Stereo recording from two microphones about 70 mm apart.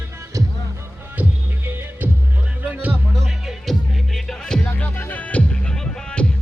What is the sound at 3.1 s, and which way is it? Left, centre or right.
Music, centre.